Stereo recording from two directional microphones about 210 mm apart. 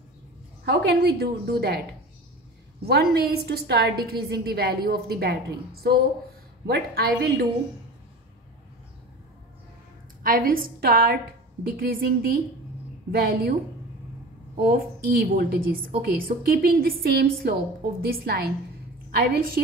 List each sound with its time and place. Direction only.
0.7 s a woman's voice: 50° right (ahead or behind)
3.2 s a woman's voice: 50° right (ahead or behind)
10.2 s a woman's voice: 40° right (ahead or behind)
14.6 s a woman's voice: 45° right (ahead or behind)